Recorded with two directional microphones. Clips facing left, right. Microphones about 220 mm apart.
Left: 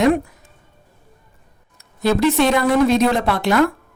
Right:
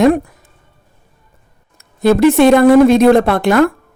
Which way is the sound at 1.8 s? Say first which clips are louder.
Right 7 dB; 55° right (ahead or behind).